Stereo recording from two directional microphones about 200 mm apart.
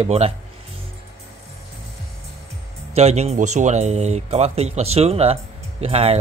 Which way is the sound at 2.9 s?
30° right (ahead or behind).